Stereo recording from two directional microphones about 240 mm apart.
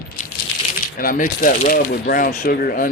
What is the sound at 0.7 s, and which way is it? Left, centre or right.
Speech, left.